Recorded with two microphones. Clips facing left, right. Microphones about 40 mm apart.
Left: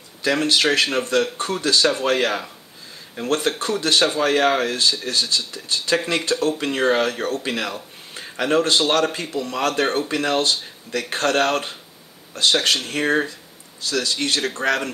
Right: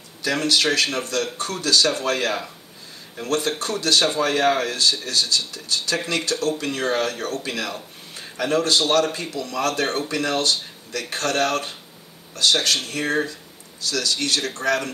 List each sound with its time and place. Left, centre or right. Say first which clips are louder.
0.2 s speech: left 2 dB; left